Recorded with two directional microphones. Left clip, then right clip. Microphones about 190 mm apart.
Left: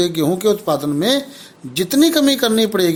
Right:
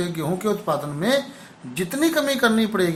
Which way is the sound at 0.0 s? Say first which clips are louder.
Left 9 dB; 50° left (ahead or behind).